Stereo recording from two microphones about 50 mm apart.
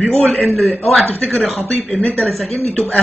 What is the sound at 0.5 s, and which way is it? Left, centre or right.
A man's voice, left.